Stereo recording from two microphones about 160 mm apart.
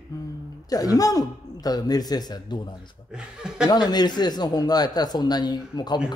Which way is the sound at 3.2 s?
5° right (ahead or behind).